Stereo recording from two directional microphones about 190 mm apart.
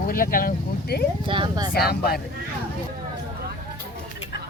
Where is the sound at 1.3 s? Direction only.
25° right (ahead or behind).